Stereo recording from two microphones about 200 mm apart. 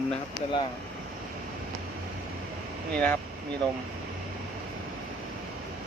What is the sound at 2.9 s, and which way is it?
Speech, 5° left (ahead or behind).